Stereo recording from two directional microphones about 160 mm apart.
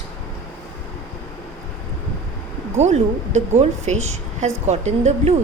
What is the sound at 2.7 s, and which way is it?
A woman's voice, 45° right (ahead or behind).